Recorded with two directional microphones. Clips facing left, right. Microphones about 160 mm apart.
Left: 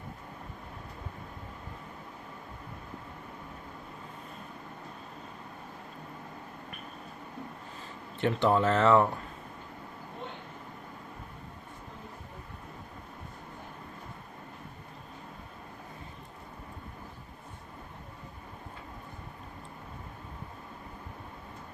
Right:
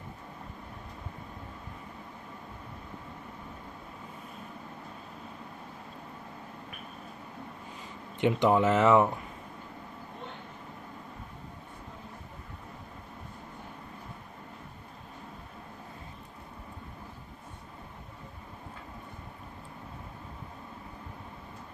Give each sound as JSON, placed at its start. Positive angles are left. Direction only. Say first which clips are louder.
{"t": 8.2, "sound": "speech", "louder": "right 2 dB", "side_deg": -15}